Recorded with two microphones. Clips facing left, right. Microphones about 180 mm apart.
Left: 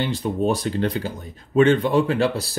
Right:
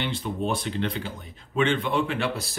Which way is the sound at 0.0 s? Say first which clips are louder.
Left 6 dB; 40° left (ahead or behind).